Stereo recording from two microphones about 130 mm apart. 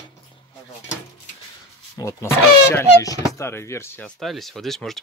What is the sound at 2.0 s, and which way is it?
Speech, 20° left (ahead or behind).